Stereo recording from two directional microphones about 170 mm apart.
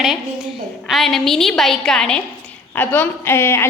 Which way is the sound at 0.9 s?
Centre (ahead or behind).